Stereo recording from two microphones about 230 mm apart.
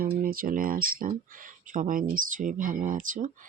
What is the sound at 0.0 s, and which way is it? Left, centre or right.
Speech, right.